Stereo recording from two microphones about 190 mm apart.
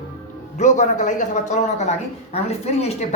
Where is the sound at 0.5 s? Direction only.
40° left (ahead or behind).